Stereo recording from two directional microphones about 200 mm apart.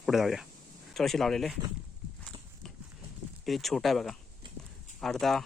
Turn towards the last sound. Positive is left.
turn(degrees=0)  # may be behind; listen again after turning